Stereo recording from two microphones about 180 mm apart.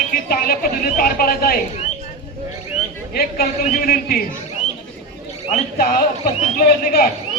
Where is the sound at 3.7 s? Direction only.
55° left (ahead or behind).